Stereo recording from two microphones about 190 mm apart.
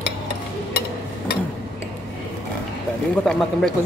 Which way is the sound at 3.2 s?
Centre (ahead or behind).